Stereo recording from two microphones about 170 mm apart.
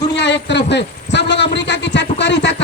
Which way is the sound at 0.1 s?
90° left.